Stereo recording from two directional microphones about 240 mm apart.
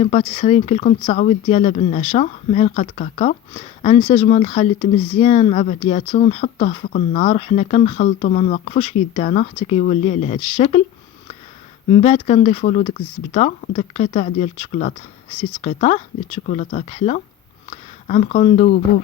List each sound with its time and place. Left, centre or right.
0.0 s speech: left
11.9 s speech: left